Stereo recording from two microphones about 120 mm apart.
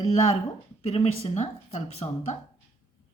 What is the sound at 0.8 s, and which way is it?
A woman's voice, 55° left (ahead or behind).